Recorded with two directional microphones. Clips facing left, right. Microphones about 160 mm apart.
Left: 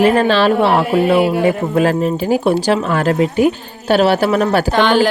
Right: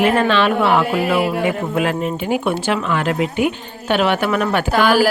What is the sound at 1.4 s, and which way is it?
Speech, 35° left (ahead or behind).